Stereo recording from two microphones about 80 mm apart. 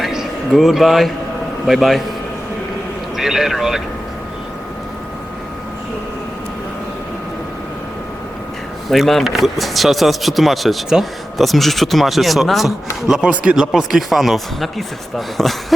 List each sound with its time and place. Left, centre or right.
0.0 s a sound: centre
1.6 s speech: centre
3.2 s speech: centre
8.9 s speech: centre
13.3 s speech: centre
13.6 s speech: centre